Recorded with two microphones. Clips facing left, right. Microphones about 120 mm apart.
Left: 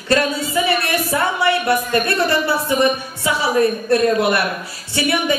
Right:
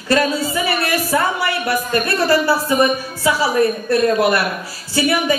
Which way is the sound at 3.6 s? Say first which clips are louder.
Left 2 dB; 25° left (ahead or behind).